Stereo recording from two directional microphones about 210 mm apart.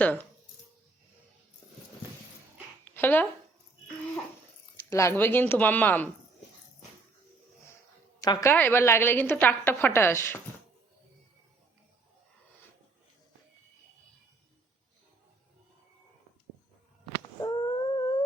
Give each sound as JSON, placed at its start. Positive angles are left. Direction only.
{"t": 0.0, "sound": "a woman's voice", "side_deg": 5}
{"t": 2.8, "sound": "a sound", "side_deg": 10}
{"t": 4.9, "sound": "a woman's voice", "side_deg": 15}
{"t": 8.2, "sound": "a woman's voice", "side_deg": 15}
{"t": 17.4, "sound": "dog", "side_deg": 20}